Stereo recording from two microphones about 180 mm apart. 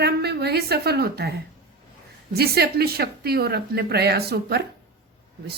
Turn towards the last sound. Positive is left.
turn(degrees=-60)  # may be behind; listen again after turning